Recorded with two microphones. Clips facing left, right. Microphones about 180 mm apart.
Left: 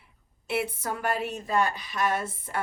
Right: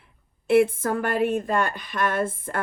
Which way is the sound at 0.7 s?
50° right (ahead or behind).